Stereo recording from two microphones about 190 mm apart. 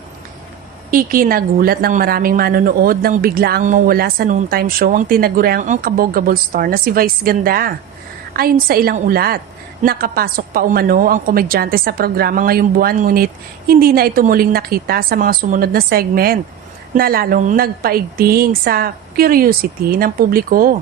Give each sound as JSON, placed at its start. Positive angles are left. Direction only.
{"t": 0.9, "sound": "a woman's voice", "side_deg": -45}